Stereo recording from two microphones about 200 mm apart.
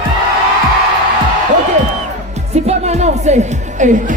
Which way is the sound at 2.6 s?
35° right (ahead or behind).